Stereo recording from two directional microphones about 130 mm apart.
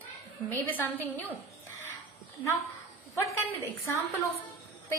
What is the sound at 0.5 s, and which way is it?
Speech, 15° left (ahead or behind).